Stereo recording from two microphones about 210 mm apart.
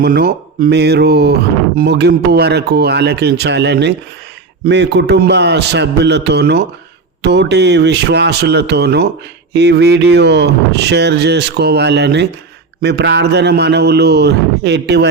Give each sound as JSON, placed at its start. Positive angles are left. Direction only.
{"t": 0.0, "sound": "speech", "side_deg": -50}